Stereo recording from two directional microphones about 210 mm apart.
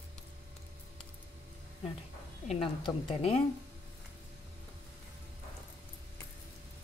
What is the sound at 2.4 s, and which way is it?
Speech, 25° left (ahead or behind).